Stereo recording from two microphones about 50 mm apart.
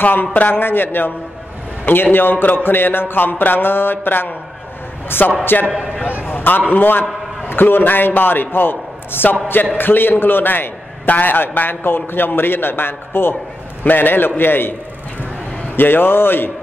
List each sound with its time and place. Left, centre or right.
0.0 s a man's voice: left
5.4 s a man's voice: left